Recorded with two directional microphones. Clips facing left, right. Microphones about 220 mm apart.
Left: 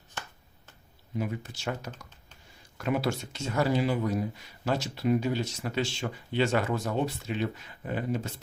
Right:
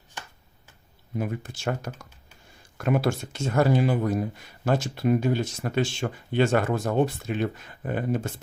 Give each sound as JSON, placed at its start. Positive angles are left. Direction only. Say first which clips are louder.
{"t": 1.1, "sound": "speech", "louder": "right 3 dB", "side_deg": -50}